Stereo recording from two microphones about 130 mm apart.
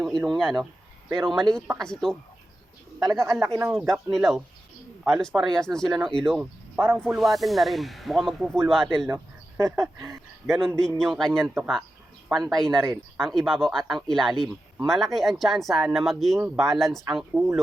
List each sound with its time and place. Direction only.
0.3 s speech: centre (ahead or behind)
3.0 s speech: 25° right (ahead or behind)
4.1 s speech: centre (ahead or behind)
6.4 s speech: 10° right (ahead or behind)
9.0 s speech: 20° right (ahead or behind)
10.8 s speech: 5° left (ahead or behind)